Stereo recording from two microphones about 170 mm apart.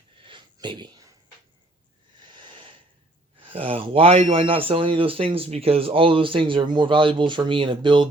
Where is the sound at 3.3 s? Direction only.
30° right (ahead or behind).